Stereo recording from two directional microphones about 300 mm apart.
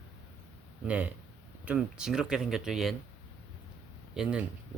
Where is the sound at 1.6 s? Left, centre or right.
Centre.